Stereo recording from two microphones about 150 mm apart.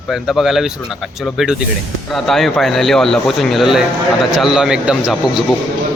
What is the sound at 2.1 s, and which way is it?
A man's voice, centre (ahead or behind).